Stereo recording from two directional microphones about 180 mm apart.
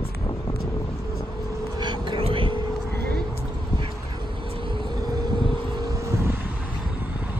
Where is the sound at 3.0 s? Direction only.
60° right (ahead or behind).